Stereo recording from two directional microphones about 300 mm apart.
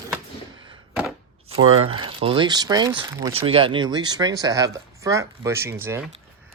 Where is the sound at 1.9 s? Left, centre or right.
Centre.